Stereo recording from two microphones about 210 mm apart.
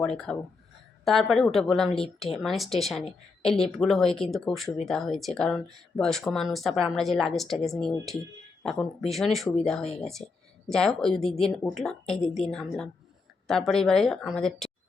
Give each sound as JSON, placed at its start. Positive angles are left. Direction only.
{"t": 0.0, "sound": "speech", "side_deg": 5}
{"t": 9.8, "sound": "speech", "side_deg": 30}
{"t": 10.7, "sound": "speech", "side_deg": 0}